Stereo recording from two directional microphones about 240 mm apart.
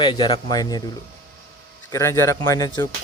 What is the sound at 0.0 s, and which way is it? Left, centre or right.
Speech, centre.